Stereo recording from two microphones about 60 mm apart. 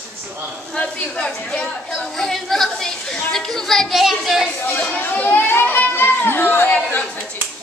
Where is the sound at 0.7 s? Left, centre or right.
Centre.